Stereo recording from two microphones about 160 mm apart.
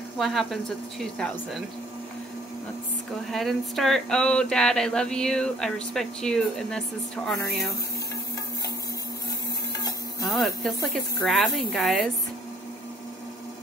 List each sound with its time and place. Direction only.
0.2 s speech: centre (ahead or behind)
3.3 s speech: centre (ahead or behind)
10.2 s speech: centre (ahead or behind)